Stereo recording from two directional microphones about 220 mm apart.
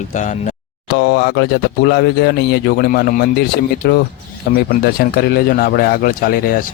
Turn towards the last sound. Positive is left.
turn(degrees=40)  # may be behind; listen again after turning